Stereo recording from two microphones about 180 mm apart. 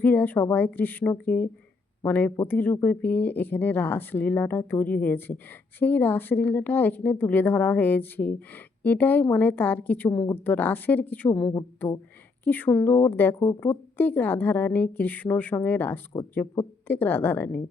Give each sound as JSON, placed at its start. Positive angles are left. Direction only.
{"t": 0.0, "sound": "a woman's voice", "side_deg": 10}
{"t": 12.5, "sound": "a woman's voice", "side_deg": 10}